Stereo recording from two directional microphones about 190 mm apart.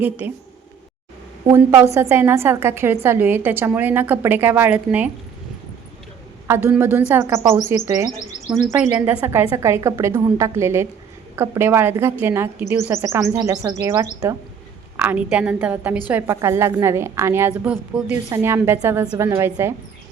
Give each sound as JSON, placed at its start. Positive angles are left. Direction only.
{"t": 0.0, "sound": "a woman's voice", "side_deg": -10}
{"t": 1.5, "sound": "a woman's voice", "side_deg": -15}
{"t": 6.5, "sound": "a woman's voice", "side_deg": -10}
{"t": 8.6, "sound": "a woman's voice", "side_deg": -5}